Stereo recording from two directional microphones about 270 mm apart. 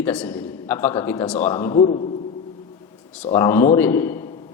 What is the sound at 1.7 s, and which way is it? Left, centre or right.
Speech, left.